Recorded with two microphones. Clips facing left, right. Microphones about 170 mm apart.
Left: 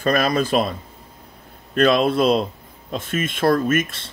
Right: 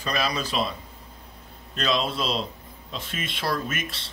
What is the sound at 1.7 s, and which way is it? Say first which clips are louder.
Speech: left 10 dB; 55° left (ahead or behind).